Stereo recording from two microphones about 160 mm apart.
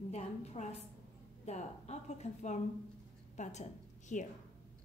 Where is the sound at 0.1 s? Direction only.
45° left (ahead or behind).